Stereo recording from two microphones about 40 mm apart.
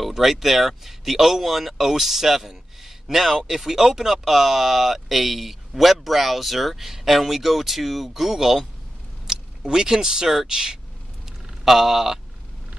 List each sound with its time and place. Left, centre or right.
0.0 s speech: centre
9.3 s a sound: centre
9.7 s speech: centre
11.6 s speech: centre